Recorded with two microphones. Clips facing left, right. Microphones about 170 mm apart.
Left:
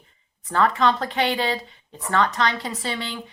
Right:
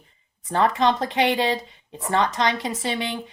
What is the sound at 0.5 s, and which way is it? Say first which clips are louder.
A woman's voice: even; 20° right (ahead or behind).